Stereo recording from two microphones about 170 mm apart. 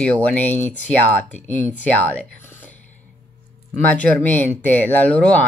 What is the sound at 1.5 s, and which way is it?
Speech, 45° left (ahead or behind).